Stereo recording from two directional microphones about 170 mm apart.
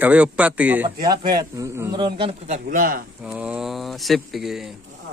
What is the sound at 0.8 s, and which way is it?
Speech, 25° right (ahead or behind).